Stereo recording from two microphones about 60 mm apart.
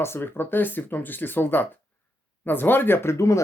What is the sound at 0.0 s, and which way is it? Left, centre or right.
Speech, left.